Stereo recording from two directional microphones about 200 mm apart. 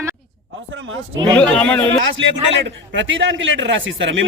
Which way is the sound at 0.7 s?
80° right.